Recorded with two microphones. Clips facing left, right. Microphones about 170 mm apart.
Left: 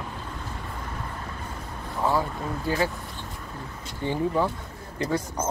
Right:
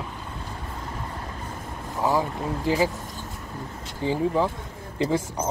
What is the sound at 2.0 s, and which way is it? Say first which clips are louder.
Speech: right 1 dB; 15° right (ahead or behind).